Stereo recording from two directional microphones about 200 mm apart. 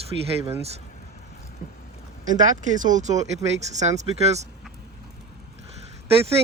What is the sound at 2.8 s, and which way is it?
Speech, 40° right (ahead or behind).